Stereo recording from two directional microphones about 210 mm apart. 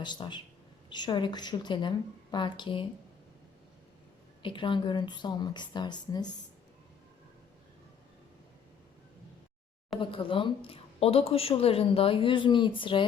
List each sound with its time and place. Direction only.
0.0 s a woman's voice: 20° left (ahead or behind)
4.4 s a woman's voice: 25° left (ahead or behind)
10.0 s a woman's voice: 25° left (ahead or behind)